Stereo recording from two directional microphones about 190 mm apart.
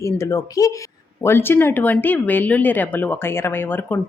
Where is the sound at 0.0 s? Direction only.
15° left (ahead or behind).